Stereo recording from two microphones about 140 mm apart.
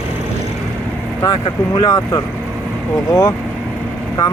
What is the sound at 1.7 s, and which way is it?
Speech, 30° left (ahead or behind).